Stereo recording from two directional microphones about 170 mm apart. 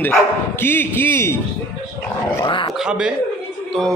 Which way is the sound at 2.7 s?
5° right (ahead or behind).